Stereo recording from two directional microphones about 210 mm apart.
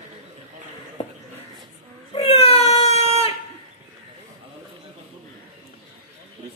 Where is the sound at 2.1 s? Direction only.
30° left (ahead or behind).